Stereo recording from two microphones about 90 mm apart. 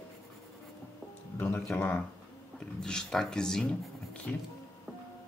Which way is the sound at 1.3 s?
25° left (ahead or behind).